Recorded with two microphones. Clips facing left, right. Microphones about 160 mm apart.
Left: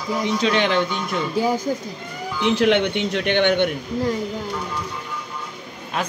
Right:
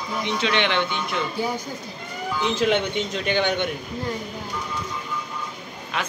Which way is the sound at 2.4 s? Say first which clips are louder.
Left 4 dB; 65° left (ahead or behind).